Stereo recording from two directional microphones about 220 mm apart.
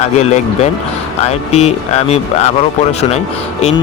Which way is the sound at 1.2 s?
30° left (ahead or behind).